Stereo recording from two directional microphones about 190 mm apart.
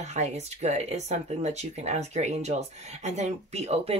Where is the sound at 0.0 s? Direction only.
35° right (ahead or behind).